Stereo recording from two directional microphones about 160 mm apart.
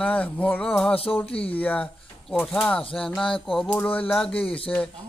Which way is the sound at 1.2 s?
35° left (ahead or behind).